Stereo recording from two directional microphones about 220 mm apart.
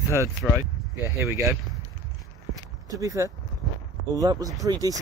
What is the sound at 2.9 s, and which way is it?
Speech, 15° right (ahead or behind).